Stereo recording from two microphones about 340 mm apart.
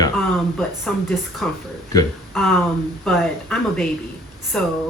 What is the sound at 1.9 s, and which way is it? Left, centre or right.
Speech, centre.